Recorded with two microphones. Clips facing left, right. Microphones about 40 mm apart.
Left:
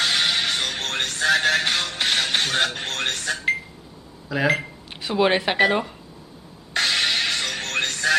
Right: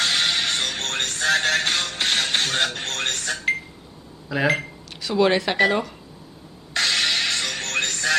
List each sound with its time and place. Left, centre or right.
0.0 s speech: centre
5.0 s speech: left
6.7 s music: centre